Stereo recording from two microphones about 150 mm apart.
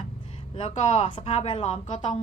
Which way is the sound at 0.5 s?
40° left (ahead or behind).